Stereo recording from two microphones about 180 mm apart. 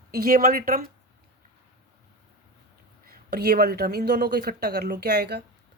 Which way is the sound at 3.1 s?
60° right (ahead or behind).